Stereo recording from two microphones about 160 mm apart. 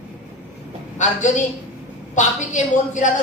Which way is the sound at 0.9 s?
50° left (ahead or behind).